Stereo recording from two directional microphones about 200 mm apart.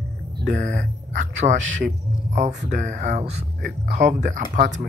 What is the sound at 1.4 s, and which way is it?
Speech, 30° right (ahead or behind).